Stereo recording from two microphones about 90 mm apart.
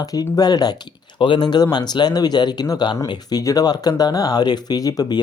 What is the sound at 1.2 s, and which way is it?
Speech, 60° left (ahead or behind).